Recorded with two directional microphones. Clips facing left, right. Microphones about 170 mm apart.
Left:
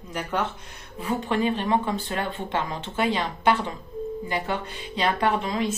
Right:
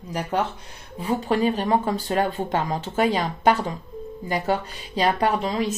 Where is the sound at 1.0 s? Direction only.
35° right (ahead or behind).